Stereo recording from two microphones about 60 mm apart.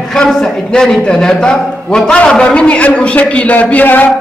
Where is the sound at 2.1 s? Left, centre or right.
Centre.